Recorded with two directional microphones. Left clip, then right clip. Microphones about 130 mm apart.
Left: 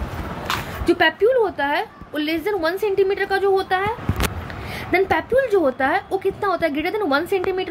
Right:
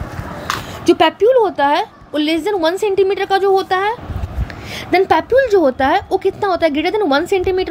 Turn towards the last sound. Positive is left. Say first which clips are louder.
# right 6 dB
turn(degrees=-50)  # may be behind; listen again after turning